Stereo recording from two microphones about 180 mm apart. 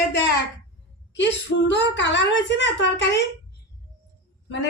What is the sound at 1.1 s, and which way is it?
A woman's voice, 80° left.